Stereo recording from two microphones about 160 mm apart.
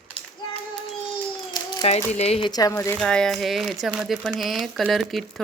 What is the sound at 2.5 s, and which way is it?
Speech, 25° left (ahead or behind).